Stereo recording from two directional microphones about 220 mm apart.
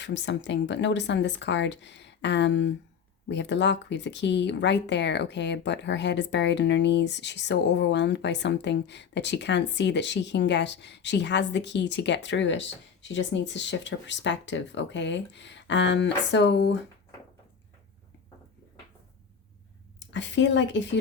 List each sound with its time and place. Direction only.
0.0 s speech: 55° left (ahead or behind)
20.0 s speech: 55° left (ahead or behind)